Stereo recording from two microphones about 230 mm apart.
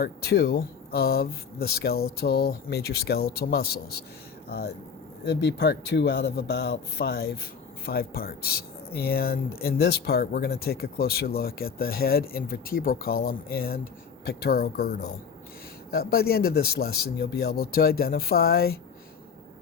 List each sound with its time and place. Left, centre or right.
0.0 s speech: left